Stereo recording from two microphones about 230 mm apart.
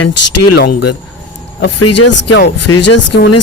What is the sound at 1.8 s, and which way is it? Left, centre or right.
Speech, left.